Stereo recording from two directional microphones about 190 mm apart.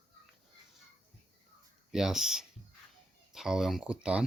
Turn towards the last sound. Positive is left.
turn(degrees=-5)  # may be behind; listen again after turning